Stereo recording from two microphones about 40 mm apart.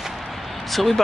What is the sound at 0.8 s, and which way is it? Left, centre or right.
Speech, centre.